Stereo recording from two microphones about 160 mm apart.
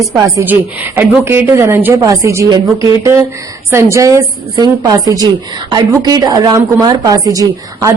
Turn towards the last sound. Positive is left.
turn(degrees=-20)  # may be behind; listen again after turning